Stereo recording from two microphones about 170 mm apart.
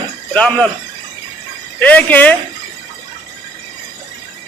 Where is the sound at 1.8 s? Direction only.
10° left (ahead or behind).